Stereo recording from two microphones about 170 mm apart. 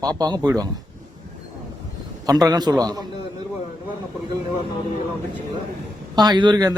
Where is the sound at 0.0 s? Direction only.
25° right (ahead or behind).